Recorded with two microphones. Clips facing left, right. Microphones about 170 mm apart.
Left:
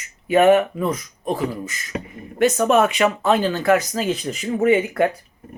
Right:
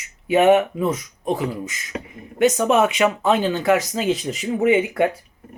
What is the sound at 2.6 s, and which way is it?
Speech, centre (ahead or behind).